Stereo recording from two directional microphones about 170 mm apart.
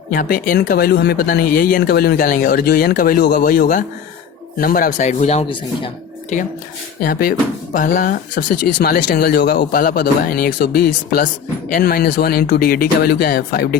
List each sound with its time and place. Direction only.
0.1 s speech: 55° left (ahead or behind); by 3.4 s 75° left (ahead or behind)
3.4 s speech: 55° left (ahead or behind); by 5.9 s 35° left (ahead or behind)
7.0 s speech: 55° left (ahead or behind)